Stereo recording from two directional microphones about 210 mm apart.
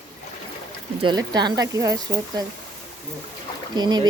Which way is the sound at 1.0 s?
20° right (ahead or behind).